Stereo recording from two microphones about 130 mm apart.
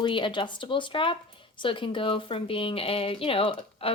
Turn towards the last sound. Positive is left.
turn(degrees=45)  # may be behind; listen again after turning